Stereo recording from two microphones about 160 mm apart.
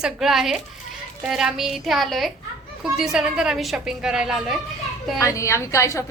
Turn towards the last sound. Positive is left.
turn(degrees=20)  # may be behind; listen again after turning